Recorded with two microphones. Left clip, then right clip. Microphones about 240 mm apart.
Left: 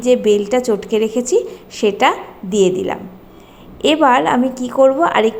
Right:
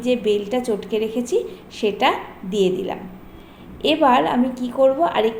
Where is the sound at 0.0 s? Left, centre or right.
Left.